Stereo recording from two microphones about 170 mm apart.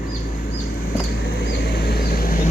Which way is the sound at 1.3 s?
70° left (ahead or behind).